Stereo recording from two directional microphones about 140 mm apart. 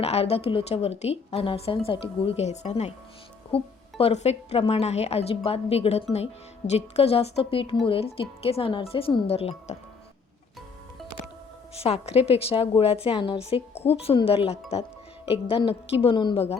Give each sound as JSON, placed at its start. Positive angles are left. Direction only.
{"t": 0.0, "sound": "a woman's voice", "side_deg": 45}
{"t": 11.7, "sound": "a woman's voice", "side_deg": 45}